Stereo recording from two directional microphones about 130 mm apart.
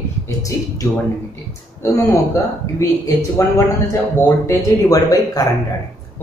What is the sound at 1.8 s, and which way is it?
Speech, 20° left (ahead or behind).